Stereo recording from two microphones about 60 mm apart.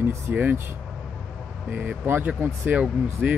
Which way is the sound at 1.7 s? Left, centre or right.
Right.